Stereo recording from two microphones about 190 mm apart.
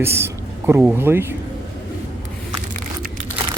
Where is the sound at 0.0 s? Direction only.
15° right (ahead or behind).